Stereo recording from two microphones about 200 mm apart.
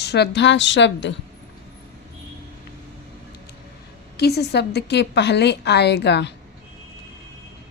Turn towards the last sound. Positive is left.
turn(degrees=60)  # may be behind; listen again after turning